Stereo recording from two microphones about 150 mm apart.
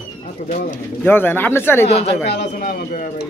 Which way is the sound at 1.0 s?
15° left (ahead or behind).